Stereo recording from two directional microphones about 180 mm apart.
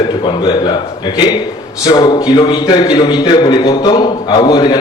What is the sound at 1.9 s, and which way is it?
A man's voice, 20° left (ahead or behind).